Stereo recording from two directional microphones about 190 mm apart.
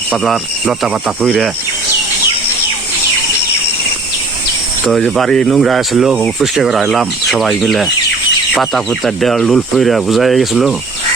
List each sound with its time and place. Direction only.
0.1 s speech: centre (ahead or behind)
4.9 s speech: centre (ahead or behind)